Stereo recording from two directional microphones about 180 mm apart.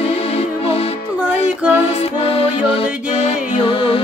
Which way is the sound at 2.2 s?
30° left (ahead or behind).